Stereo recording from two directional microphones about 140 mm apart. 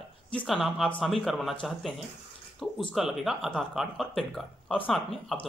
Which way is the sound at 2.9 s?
Centre (ahead or behind).